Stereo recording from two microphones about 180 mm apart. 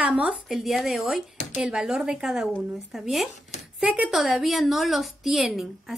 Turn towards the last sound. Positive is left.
turn(degrees=0)  # may be behind; listen again after turning